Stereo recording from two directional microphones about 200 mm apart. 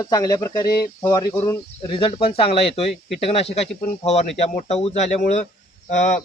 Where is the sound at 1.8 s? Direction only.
30° left (ahead or behind).